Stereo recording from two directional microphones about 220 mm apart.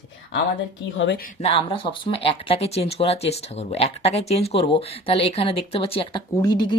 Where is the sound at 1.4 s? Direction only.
25° left (ahead or behind).